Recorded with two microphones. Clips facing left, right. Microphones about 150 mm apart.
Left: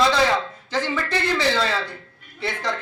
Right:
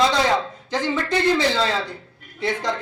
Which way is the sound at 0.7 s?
15° right (ahead or behind).